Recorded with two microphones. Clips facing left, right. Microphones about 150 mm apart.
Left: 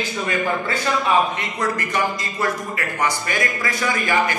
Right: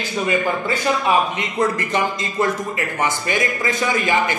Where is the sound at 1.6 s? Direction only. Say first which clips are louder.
Right 3 dB; 25° right (ahead or behind).